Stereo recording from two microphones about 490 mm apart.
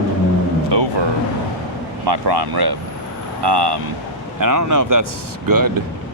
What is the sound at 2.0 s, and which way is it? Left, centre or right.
Speech, right.